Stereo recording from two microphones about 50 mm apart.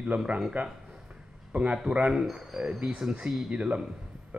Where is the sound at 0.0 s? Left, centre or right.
Centre.